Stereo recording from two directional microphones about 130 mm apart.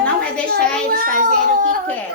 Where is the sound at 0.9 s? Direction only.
90° right.